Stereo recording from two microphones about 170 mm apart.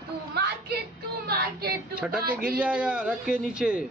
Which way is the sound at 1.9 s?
5° right (ahead or behind).